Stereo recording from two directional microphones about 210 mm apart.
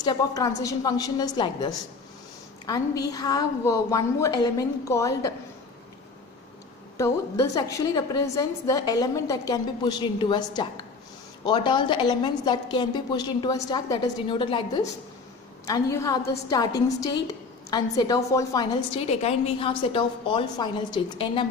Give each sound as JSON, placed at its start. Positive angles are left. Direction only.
{"t": 0.0, "sound": "a woman's voice", "side_deg": 20}
{"t": 7.0, "sound": "a woman's voice", "side_deg": 15}
{"t": 18.9, "sound": "a woman's voice", "side_deg": 30}